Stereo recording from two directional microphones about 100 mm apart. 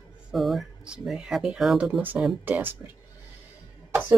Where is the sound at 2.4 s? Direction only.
20° right (ahead or behind).